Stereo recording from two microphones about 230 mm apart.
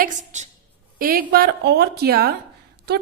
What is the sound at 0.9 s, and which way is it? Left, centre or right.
A woman's voice, right.